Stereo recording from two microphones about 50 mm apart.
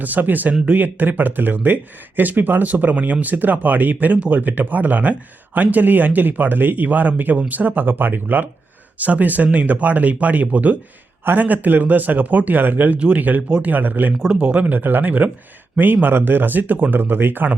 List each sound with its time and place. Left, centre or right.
0.0 s speech: right
14.3 s speech: right